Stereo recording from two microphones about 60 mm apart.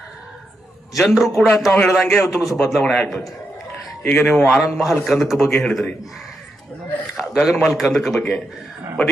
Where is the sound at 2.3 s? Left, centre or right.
Centre.